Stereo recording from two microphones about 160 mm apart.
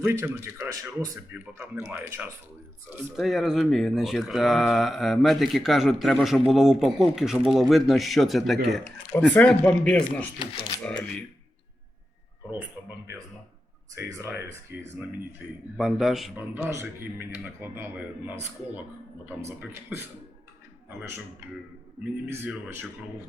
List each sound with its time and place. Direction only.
0.0 s speech: 15° right (ahead or behind)
3.2 s speech: centre (ahead or behind)
8.8 s speech: 10° left (ahead or behind)
13.9 s speech: 15° right (ahead or behind)
15.8 s speech: centre (ahead or behind)
16.4 s speech: 15° right (ahead or behind)
22.4 s speech: 10° right (ahead or behind)